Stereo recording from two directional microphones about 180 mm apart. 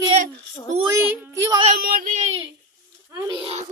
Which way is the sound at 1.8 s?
55° right (ahead or behind).